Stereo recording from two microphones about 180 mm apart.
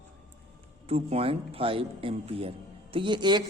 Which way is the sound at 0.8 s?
35° right (ahead or behind).